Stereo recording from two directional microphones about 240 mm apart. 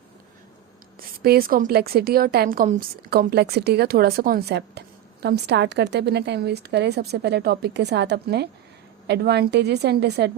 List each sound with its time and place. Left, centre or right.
0.9 s a woman's voice: right